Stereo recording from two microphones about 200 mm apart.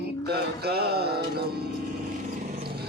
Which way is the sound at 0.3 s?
55° right (ahead or behind).